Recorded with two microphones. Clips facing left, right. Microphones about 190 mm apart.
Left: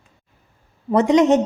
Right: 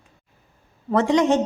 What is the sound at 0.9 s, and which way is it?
Speech, 20° left (ahead or behind).